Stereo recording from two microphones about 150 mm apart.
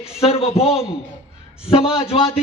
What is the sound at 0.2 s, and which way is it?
Speech, 40° left (ahead or behind).